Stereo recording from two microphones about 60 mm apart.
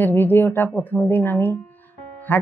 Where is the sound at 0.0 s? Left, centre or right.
Left.